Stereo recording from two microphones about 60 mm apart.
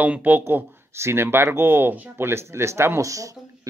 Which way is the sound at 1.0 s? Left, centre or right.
Right.